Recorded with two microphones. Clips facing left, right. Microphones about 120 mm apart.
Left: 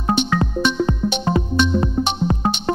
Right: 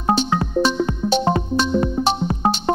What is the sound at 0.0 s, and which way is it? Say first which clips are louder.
Music: even; 35° right (ahead or behind).